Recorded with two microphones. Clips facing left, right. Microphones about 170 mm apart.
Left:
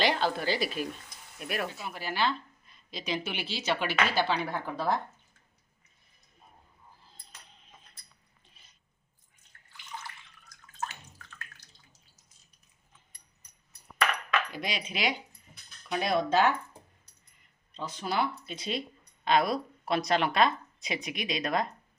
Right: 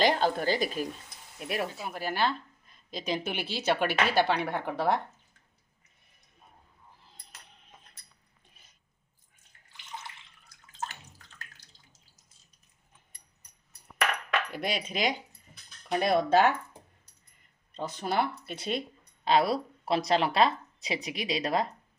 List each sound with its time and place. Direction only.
0.0 s speech: 45° right (ahead or behind)
1.4 s speech: 30° right (ahead or behind)
1.9 s speech: 50° right (ahead or behind); by 4.9 s 65° right (ahead or behind)
10.8 s bathtub: 35° right (ahead or behind)
14.5 s speech: 55° right (ahead or behind)
17.7 s speech: 55° right (ahead or behind)
19.2 s speech: 30° right (ahead or behind)